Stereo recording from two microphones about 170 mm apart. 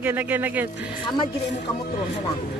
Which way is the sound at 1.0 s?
30° left (ahead or behind).